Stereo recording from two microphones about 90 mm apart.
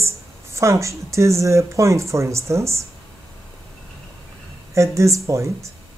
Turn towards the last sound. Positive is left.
turn(degrees=-35)  # may be behind; listen again after turning